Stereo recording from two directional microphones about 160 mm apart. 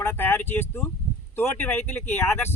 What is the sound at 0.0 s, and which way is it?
Speech, 15° left (ahead or behind).